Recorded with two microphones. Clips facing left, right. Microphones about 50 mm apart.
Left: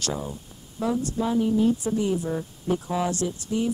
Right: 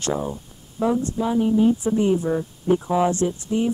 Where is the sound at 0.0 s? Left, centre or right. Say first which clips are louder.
Right 5 dB; right; by 1.4 s centre.